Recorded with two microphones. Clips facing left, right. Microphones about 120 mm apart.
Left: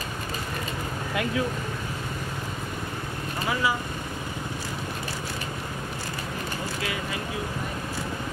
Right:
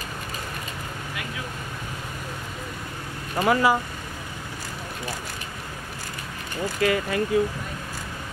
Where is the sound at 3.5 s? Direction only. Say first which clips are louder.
Right 7 dB; 55° right (ahead or behind).